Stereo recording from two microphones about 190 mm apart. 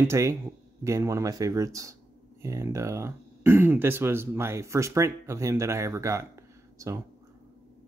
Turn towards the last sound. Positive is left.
turn(degrees=-15)  # may be behind; listen again after turning